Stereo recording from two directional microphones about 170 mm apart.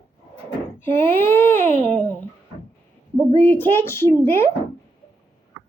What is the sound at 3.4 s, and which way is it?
Speech, 10° left (ahead or behind).